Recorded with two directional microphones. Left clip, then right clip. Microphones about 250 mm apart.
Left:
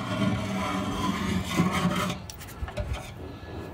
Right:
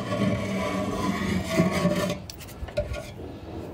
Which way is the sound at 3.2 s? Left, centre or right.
Centre.